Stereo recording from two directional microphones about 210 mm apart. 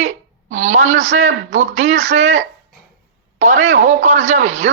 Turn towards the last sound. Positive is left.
turn(degrees=-35)  # may be behind; listen again after turning